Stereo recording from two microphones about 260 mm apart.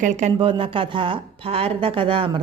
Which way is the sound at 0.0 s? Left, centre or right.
Right.